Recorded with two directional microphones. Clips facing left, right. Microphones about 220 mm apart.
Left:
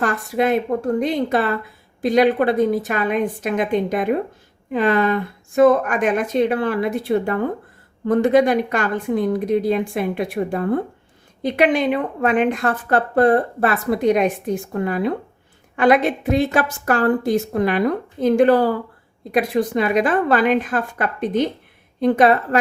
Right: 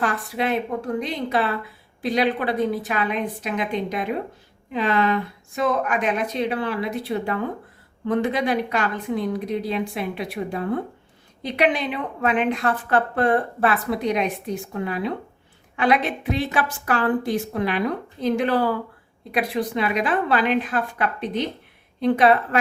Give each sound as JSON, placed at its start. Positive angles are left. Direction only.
{"t": 0.0, "sound": "a woman's voice", "side_deg": 45}